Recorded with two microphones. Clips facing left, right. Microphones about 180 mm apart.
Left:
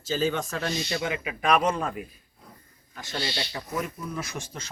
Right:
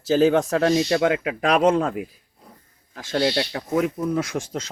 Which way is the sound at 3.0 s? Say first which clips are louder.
Right 11 dB; 75° right (ahead or behind).